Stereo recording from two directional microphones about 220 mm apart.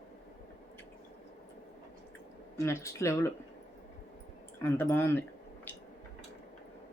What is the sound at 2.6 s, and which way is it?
Speech, 10° left (ahead or behind).